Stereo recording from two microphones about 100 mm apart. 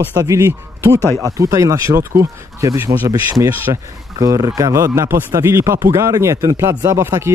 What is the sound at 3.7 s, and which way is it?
Speech, 50° right (ahead or behind).